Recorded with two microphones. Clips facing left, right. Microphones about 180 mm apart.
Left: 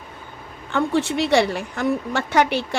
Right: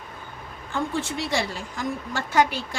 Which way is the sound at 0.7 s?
70° left (ahead or behind).